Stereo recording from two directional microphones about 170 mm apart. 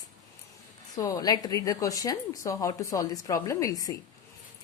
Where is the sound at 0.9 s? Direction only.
20° left (ahead or behind).